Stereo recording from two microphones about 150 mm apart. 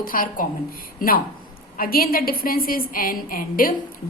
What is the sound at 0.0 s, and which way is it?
A woman's voice, 70° left (ahead or behind).